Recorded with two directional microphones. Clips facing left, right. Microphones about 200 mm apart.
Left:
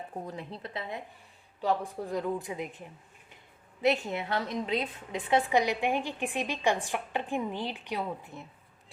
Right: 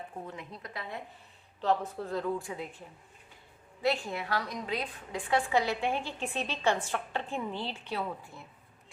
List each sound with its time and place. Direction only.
0.3 s a woman's voice: 35° left (ahead or behind)